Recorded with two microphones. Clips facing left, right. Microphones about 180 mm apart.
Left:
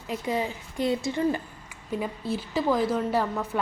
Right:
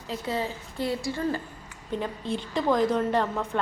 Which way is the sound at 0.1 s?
15° left (ahead or behind).